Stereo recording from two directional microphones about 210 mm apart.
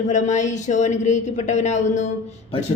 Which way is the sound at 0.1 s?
35° left (ahead or behind).